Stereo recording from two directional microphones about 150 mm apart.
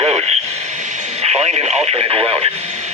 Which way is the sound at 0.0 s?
40° right (ahead or behind).